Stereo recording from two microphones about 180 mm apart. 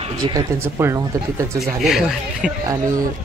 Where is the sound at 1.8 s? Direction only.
Centre (ahead or behind).